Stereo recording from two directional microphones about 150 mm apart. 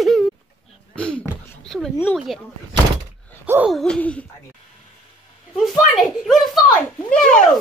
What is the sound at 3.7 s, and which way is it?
Hoot, 5° left (ahead or behind).